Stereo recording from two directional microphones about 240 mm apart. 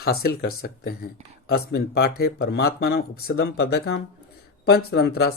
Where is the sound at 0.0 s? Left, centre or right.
Left.